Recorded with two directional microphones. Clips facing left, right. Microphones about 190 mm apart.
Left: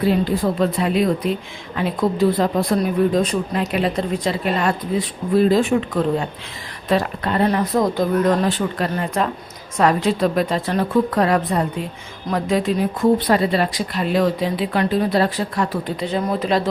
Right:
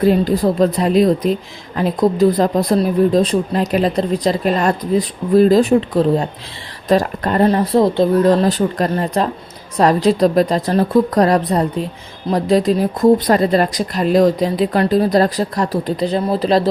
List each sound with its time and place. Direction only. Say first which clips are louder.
0.0 s speech: right 4 dB; 40° right (ahead or behind)